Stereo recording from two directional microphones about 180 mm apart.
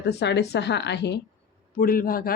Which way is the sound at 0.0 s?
70° left (ahead or behind).